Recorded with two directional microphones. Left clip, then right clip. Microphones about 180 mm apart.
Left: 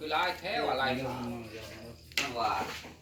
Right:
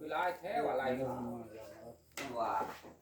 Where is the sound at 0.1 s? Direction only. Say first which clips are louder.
Left 5 dB; 45° right (ahead or behind).